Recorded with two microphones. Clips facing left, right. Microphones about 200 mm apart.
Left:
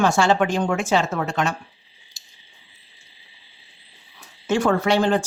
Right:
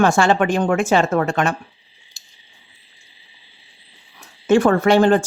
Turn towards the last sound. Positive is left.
turn(degrees=-55)  # may be behind; listen again after turning